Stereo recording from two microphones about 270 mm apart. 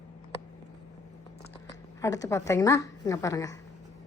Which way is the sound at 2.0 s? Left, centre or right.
Centre.